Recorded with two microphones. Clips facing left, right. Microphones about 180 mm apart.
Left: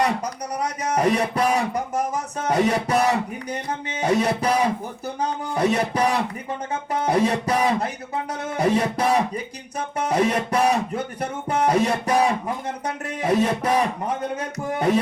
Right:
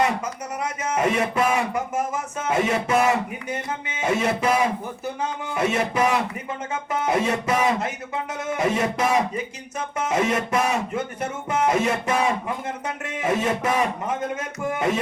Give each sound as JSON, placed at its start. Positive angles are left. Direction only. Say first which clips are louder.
{"t": 0.6, "sound": "a man's voice", "louder": "left 2 dB", "side_deg": 35}